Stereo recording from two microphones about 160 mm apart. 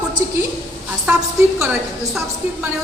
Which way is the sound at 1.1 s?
10° right (ahead or behind).